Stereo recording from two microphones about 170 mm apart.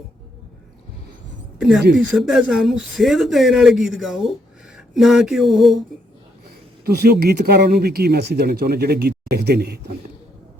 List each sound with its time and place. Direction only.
1.5 s speech: centre (ahead or behind)
4.7 s a sound: centre (ahead or behind)
6.8 s speech: 70° right (ahead or behind)